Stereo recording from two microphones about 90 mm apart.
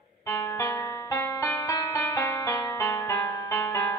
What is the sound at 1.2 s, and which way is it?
Music, 25° left (ahead or behind).